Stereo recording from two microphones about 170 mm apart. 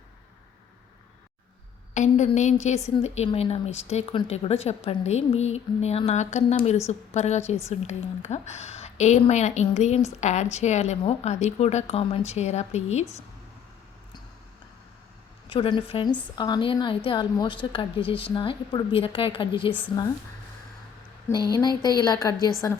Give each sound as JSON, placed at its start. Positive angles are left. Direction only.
{"t": 1.9, "sound": "a woman's voice", "side_deg": 45}
{"t": 15.4, "sound": "a woman's voice", "side_deg": 30}
{"t": 21.2, "sound": "a woman's voice", "side_deg": 25}